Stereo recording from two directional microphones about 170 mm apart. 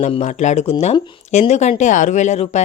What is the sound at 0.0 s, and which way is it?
Speech, 40° left (ahead or behind).